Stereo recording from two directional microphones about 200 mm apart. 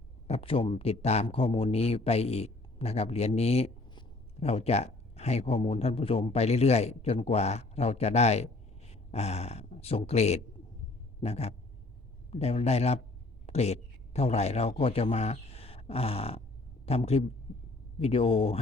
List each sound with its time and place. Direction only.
0.3 s a man's voice: 30° left (ahead or behind)